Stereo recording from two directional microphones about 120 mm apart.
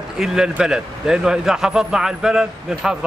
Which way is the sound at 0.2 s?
5° right (ahead or behind).